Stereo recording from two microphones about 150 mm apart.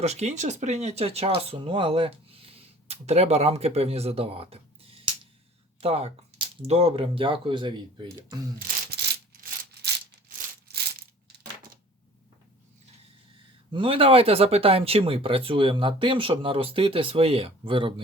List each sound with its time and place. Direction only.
0.0 s speech: 45° right (ahead or behind); by 8.4 s 30° right (ahead or behind)
8.5 s a sound: 75° right (ahead or behind)
13.7 s speech: 35° right (ahead or behind)